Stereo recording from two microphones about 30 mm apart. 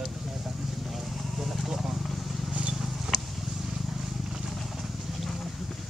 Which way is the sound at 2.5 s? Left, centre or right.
Right.